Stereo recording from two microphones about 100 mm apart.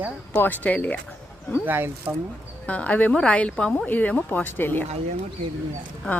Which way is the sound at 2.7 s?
15° left (ahead or behind).